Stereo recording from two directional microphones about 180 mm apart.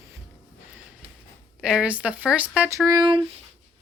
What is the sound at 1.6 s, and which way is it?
Speech, centre (ahead or behind).